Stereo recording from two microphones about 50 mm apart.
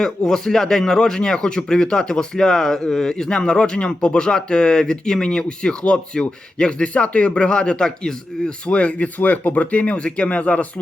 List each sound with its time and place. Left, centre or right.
0.0 s a man's voice: centre
8.6 s speech: left